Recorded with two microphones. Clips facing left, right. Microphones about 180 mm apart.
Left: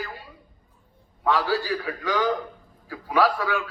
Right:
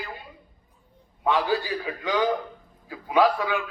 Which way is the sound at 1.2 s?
20° right (ahead or behind).